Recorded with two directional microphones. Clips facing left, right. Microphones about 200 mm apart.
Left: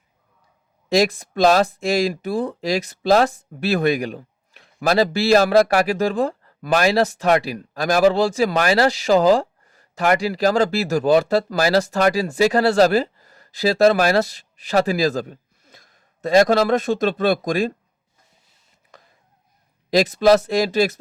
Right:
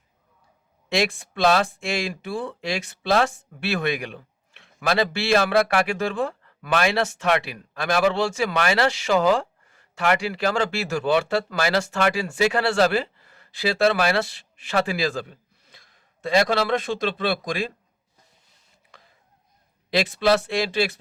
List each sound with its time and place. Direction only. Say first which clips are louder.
0.9 s speech: left 6 dB; 40° left (ahead or behind)
19.9 s speech: left 6 dB; 40° left (ahead or behind)